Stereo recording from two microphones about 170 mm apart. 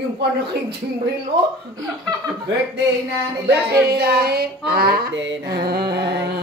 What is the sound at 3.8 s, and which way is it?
Mantra, 70° right (ahead or behind).